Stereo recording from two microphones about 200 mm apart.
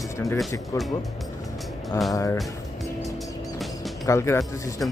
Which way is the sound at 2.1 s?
15° left (ahead or behind).